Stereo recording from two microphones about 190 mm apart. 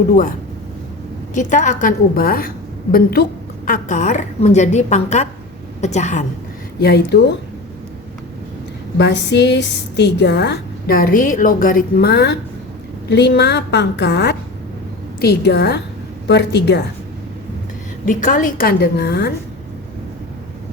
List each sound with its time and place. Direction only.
1.3 s a woman's voice: 40° left (ahead or behind)
3.7 s a woman's voice: 40° left (ahead or behind)
6.7 s a woman's voice: 60° left (ahead or behind)
9.0 s a woman's voice: 65° left (ahead or behind)
18.0 s a woman's voice: 45° left (ahead or behind); by 19.3 s 60° left (ahead or behind)